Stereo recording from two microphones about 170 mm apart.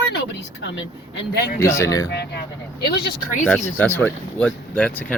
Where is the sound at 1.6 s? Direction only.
20° left (ahead or behind).